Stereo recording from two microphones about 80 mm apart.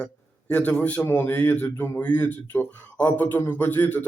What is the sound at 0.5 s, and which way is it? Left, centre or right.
A man's voice, centre.